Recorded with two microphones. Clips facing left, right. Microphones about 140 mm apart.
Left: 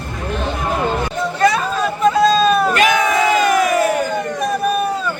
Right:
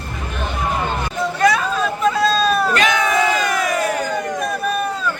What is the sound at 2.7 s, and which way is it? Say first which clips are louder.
Battle cry: left 2 dB; 20° left (ahead or behind).